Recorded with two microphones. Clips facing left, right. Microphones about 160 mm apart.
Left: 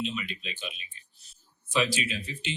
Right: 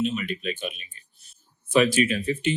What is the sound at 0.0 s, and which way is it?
Speech, 45° right (ahead or behind).